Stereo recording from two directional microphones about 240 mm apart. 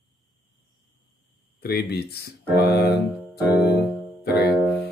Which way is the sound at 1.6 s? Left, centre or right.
Left.